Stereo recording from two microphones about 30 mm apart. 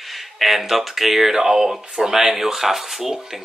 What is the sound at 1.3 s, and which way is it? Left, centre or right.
Speech, centre.